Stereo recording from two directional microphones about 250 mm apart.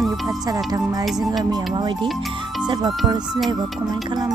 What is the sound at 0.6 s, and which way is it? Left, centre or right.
Speech, centre.